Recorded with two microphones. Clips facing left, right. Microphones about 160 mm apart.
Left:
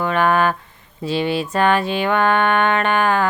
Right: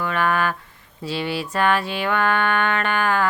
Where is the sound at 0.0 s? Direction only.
25° left (ahead or behind).